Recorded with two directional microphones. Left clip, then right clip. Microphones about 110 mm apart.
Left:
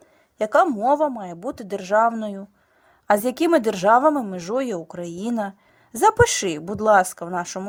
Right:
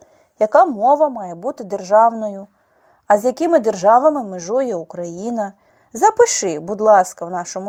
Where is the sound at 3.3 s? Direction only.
40° left (ahead or behind).